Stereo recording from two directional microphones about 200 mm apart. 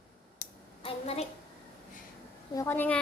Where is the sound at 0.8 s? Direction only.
30° left (ahead or behind).